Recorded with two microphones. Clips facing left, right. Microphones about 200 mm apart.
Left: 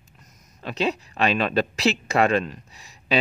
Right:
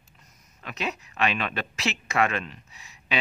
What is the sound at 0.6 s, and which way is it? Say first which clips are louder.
Speech: left 7 dB; 30° left (ahead or behind).